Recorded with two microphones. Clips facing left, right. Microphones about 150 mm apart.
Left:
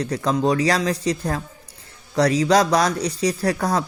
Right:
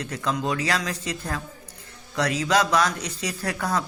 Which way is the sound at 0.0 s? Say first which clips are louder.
Left 7 dB; 35° left (ahead or behind).